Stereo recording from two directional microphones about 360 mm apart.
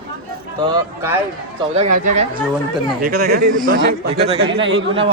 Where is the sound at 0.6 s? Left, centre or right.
Centre; by 4.5 s right.